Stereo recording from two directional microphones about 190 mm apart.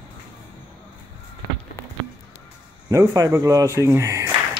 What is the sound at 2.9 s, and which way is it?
A man's voice, 15° right (ahead or behind).